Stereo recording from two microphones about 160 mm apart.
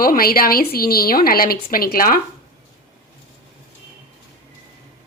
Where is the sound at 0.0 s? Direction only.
65° left (ahead or behind).